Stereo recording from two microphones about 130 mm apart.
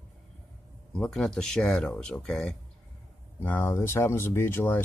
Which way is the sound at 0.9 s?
5° left (ahead or behind).